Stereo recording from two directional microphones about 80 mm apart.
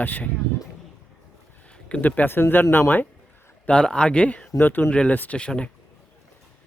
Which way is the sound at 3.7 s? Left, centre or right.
Centre.